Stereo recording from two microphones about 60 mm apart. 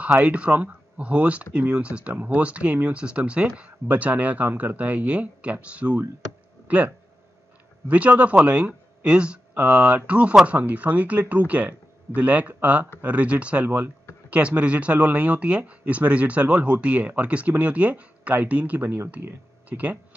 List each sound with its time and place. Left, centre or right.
0.2 s speech: right
7.9 s speech: right
9.5 s speech: right